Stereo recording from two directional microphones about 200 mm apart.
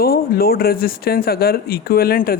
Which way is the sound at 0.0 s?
50° left (ahead or behind).